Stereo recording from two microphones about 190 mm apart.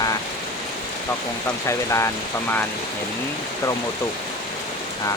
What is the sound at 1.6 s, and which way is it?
Speech, 15° left (ahead or behind).